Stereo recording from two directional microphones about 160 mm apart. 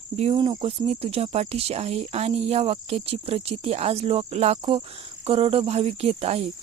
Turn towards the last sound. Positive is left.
turn(degrees=-40)  # may be behind; listen again after turning